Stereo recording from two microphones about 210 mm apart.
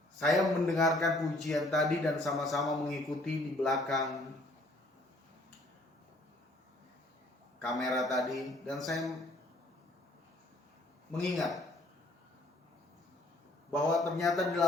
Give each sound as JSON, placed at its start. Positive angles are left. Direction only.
{"t": 0.2, "sound": "speech", "side_deg": 0}
{"t": 7.6, "sound": "speech", "side_deg": 0}
{"t": 11.2, "sound": "speech", "side_deg": 0}
{"t": 14.0, "sound": "speech", "side_deg": 0}